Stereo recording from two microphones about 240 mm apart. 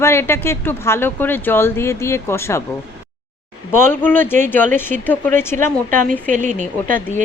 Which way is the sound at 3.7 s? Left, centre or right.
Centre.